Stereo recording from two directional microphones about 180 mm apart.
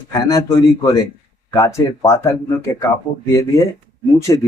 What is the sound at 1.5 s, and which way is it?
Speech, 15° left (ahead or behind).